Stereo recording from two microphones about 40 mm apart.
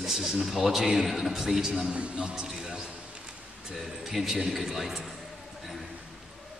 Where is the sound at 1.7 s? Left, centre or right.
Right.